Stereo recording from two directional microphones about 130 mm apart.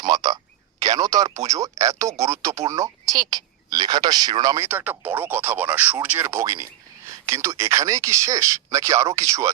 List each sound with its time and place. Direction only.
0.0 s speech: 30° right (ahead or behind)